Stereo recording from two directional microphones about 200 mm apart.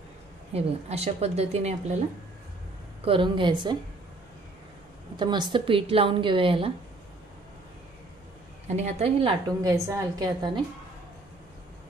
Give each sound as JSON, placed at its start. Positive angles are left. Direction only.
{"t": 0.5, "sound": "a woman's voice", "side_deg": -30}
{"t": 3.0, "sound": "a woman's voice", "side_deg": -25}
{"t": 5.1, "sound": "a woman's voice", "side_deg": -20}
{"t": 8.6, "sound": "a woman's voice", "side_deg": -35}